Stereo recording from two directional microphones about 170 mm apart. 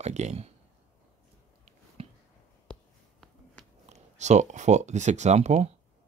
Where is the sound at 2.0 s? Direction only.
35° right (ahead or behind).